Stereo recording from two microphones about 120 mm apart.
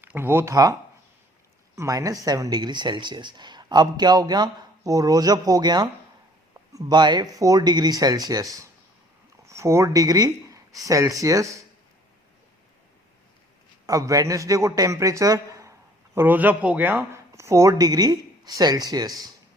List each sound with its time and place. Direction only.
0.0 s speech: 15° right (ahead or behind)
13.8 s speech: 30° right (ahead or behind)
16.1 s speech: 15° right (ahead or behind); by 19.3 s 30° right (ahead or behind)